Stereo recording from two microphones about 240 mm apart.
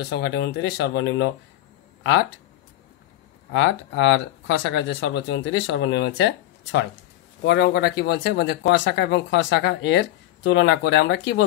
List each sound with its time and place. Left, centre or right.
0.1 s speech: left
3.5 s speech: left